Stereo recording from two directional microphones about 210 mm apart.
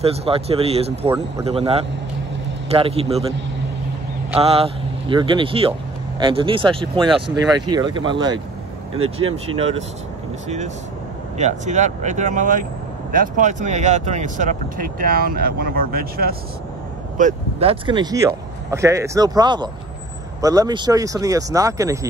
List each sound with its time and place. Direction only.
0.0 s speech: 30° right (ahead or behind)
4.4 s speech: 25° right (ahead or behind)
7.0 s speech: centre (ahead or behind)
7.7 s speech: 20° right (ahead or behind)
11.3 s speech: 35° right (ahead or behind)
17.2 s speech: 35° right (ahead or behind); by 22.0 s 15° right (ahead or behind)